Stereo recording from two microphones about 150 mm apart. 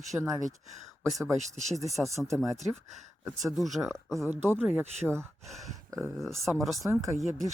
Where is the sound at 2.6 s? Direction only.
50° right (ahead or behind).